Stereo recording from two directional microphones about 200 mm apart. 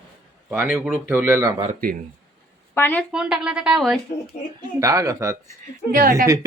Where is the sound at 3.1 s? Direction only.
5° right (ahead or behind).